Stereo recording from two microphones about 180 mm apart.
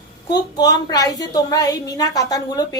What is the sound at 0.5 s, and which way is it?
Speech, 20° left (ahead or behind).